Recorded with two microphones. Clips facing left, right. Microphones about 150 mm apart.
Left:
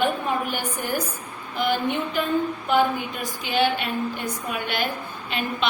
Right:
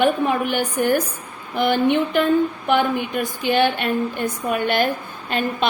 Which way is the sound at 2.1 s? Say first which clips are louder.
Right 7 dB; 70° right (ahead or behind).